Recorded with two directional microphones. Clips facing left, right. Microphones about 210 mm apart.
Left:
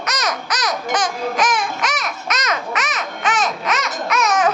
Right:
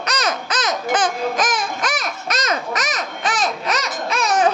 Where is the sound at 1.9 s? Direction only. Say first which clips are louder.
Even; 30° right (ahead or behind).